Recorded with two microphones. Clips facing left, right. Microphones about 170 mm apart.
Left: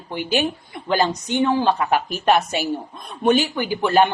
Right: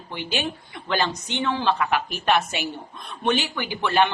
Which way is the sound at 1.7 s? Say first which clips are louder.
Left 3 dB; 40° left (ahead or behind).